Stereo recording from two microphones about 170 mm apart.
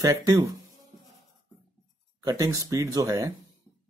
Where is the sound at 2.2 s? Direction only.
20° right (ahead or behind).